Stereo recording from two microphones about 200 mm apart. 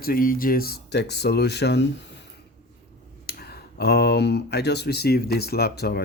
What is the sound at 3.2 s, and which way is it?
Speech, 50° left (ahead or behind).